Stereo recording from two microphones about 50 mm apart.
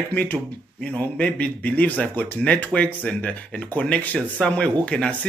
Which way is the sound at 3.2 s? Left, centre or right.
Left.